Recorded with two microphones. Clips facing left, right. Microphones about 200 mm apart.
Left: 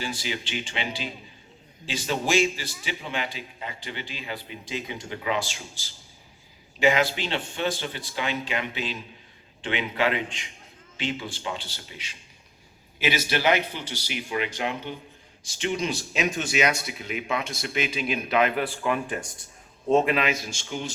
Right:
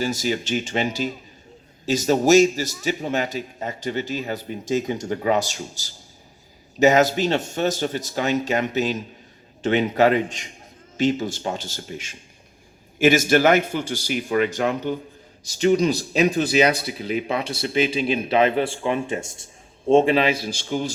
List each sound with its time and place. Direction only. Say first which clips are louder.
0.0 s a man's voice: right 8 dB; 45° right (ahead or behind)